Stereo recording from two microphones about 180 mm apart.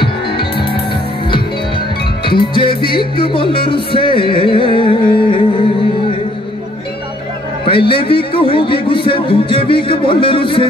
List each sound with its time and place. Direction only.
0.0 s music: 30° left (ahead or behind)
2.2 s a man's voice: 25° left (ahead or behind)
3.6 s music: 30° left (ahead or behind)
7.6 s a man's voice: 30° left (ahead or behind)